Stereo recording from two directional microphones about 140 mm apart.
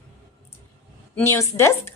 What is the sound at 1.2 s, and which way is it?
Speech, 20° left (ahead or behind).